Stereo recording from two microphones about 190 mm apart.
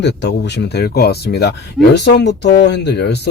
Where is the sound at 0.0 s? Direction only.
65° left (ahead or behind).